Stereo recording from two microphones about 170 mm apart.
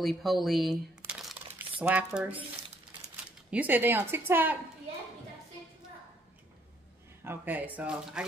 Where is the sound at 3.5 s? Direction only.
10° right (ahead or behind).